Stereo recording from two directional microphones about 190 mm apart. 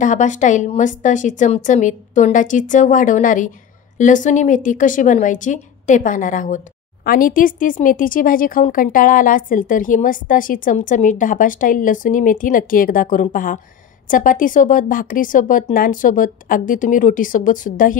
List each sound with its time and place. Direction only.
0.0 s a woman's voice: 40° left (ahead or behind)